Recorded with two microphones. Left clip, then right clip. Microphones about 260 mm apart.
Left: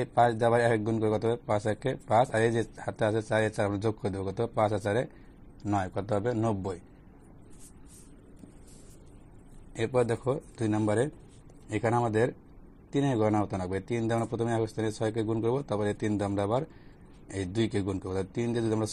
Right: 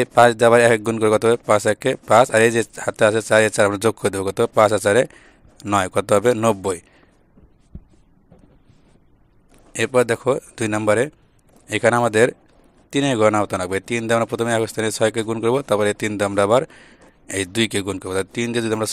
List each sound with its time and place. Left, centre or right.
0.2 s speech: right
4.0 s speech: right
4.4 s speech: right
9.8 s speech: right